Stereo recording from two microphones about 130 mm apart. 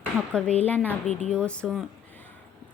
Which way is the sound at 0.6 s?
10° left (ahead or behind).